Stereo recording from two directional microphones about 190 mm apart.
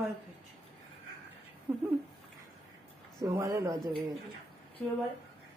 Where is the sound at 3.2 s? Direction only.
15° right (ahead or behind).